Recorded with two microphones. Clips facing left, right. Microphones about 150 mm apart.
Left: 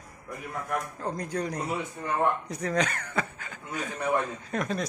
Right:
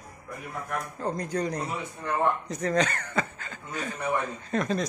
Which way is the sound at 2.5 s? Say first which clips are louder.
Right 2 dB; 10° left (ahead or behind).